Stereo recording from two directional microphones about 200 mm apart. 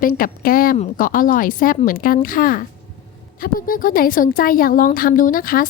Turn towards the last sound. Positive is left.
turn(degrees=45)  # may be behind; listen again after turning